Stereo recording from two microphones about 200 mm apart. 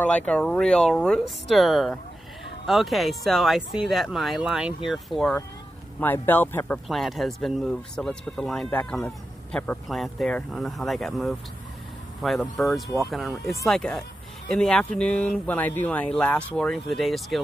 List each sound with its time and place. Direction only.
0.0 s speech: 5° left (ahead or behind)